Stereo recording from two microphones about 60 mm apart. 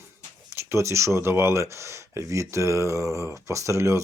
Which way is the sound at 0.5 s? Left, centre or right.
Right.